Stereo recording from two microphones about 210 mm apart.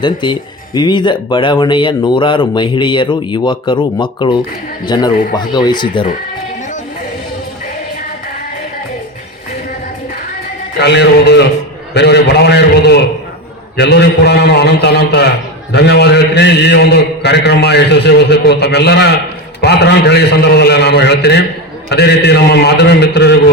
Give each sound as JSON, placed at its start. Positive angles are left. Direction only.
{"t": 0.0, "sound": "speech", "side_deg": 20}
{"t": 10.8, "sound": "music", "side_deg": 55}
{"t": 11.9, "sound": "a sound", "side_deg": 50}
{"t": 13.7, "sound": "a man's voice", "side_deg": 50}